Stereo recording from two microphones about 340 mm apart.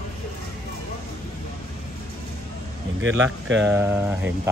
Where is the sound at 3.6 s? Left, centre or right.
Centre.